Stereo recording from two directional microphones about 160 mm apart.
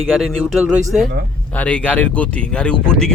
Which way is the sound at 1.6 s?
10° left (ahead or behind).